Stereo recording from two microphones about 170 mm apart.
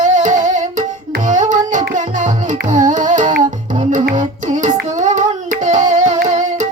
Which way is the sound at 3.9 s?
50° right (ahead or behind).